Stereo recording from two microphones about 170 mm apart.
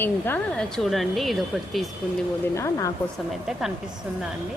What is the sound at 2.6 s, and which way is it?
Speech, 20° left (ahead or behind).